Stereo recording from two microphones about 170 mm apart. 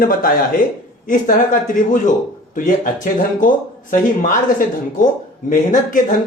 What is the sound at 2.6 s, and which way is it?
Speech, 55° left (ahead or behind).